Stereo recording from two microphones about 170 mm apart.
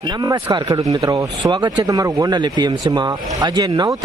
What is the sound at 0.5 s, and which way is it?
A man's voice, 25° right (ahead or behind).